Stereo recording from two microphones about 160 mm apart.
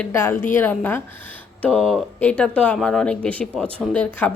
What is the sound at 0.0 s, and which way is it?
A woman's voice, 15° left (ahead or behind).